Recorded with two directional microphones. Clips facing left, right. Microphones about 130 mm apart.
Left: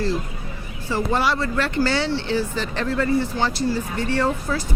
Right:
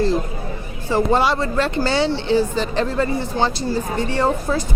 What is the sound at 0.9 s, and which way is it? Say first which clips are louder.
Speech: right 4 dB; 20° right (ahead or behind).